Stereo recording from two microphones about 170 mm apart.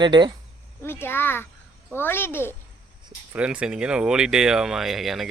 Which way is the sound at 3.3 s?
5° right (ahead or behind).